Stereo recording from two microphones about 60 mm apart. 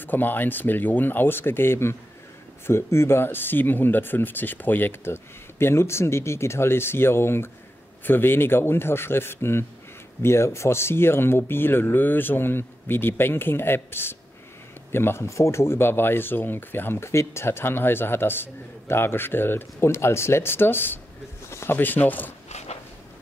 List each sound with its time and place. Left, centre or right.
0.0 s speech: left
17.0 s speech: left
21.5 s a sound: left
21.7 s speech: left